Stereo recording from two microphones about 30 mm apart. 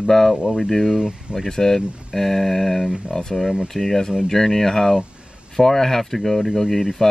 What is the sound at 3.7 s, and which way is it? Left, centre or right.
Speech, centre.